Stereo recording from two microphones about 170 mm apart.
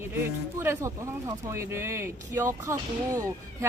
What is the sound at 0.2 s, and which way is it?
Speech, 15° right (ahead or behind).